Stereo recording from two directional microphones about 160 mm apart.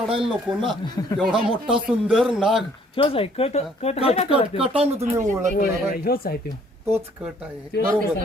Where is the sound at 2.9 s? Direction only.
35° left (ahead or behind).